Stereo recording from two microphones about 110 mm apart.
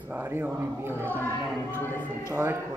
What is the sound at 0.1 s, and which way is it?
Speech, 20° right (ahead or behind).